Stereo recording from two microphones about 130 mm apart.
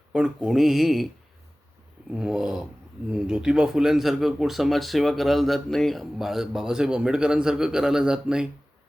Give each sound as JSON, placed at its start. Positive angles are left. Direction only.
{"t": 0.1, "sound": "speech", "side_deg": -5}
{"t": 2.0, "sound": "speech", "side_deg": -5}